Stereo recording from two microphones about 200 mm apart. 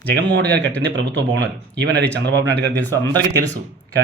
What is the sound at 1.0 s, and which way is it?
Speech, 60° right (ahead or behind).